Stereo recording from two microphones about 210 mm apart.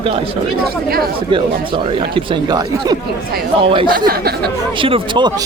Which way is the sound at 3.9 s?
45° right (ahead or behind).